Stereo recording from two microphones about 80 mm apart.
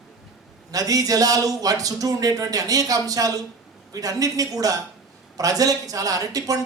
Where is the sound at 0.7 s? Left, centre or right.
Right.